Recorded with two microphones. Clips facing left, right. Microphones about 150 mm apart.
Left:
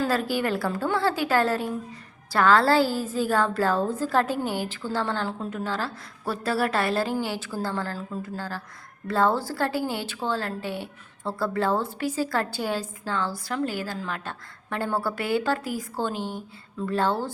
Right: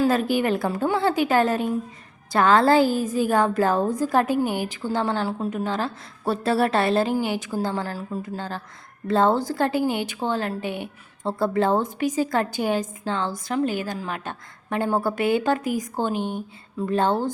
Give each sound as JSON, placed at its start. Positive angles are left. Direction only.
{"t": 0.0, "sound": "a woman's voice", "side_deg": -20}